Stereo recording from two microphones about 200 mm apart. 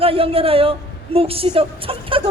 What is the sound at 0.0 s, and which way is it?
A woman's voice, 30° right (ahead or behind).